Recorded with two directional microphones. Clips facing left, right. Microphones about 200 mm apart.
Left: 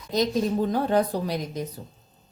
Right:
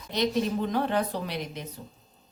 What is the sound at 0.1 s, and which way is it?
Speech, 40° left (ahead or behind).